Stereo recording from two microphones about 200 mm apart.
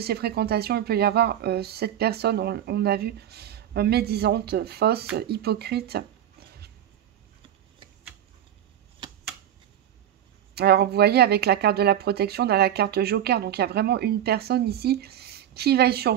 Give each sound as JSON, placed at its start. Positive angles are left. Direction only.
{"t": 0.0, "sound": "speech", "side_deg": -55}
{"t": 10.5, "sound": "speech", "side_deg": -55}